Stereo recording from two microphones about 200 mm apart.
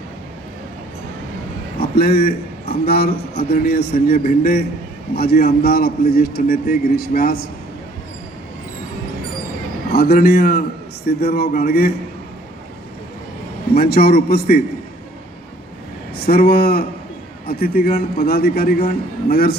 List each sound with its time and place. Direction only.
1.8 s a man's voice: 50° left (ahead or behind)
9.9 s a man's voice: 50° left (ahead or behind)
13.7 s a man's voice: 50° left (ahead or behind)
16.1 s a man's voice: 50° left (ahead or behind)